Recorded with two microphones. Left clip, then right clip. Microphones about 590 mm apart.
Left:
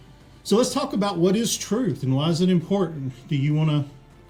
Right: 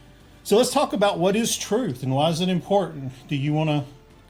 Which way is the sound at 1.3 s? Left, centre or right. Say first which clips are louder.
Right 1 dB; right.